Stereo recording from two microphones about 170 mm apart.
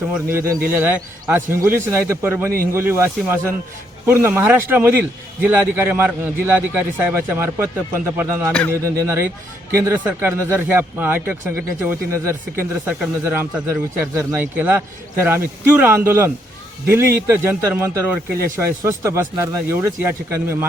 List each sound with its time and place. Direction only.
0.1 s speech: 15° right (ahead or behind)